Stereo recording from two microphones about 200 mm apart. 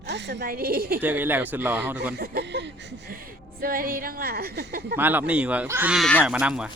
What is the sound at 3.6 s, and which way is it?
A woman's voice, 45° right (ahead or behind).